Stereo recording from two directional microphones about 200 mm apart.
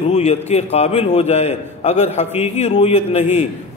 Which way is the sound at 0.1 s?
35° left (ahead or behind).